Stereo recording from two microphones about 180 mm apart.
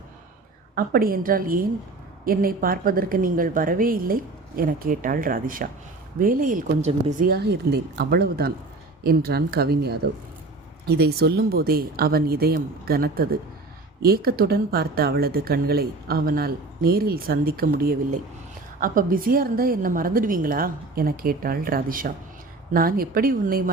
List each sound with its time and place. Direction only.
0.8 s a woman's voice: 55° right (ahead or behind)